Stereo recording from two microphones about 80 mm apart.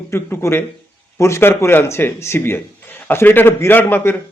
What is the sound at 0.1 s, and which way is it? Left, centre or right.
Speech, left.